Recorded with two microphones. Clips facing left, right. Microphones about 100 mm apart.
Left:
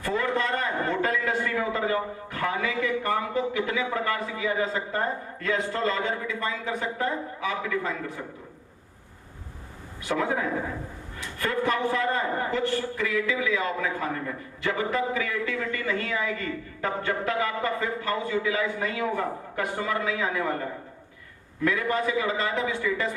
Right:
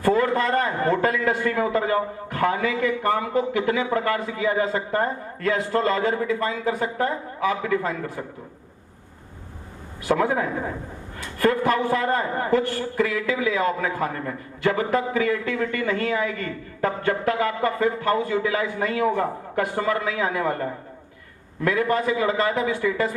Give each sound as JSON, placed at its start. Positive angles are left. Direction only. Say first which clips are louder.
{"t": 0.0, "sound": "a man's voice", "louder": "right 6 dB", "side_deg": -45}
{"t": 10.0, "sound": "a man's voice", "louder": "right 5 dB", "side_deg": -45}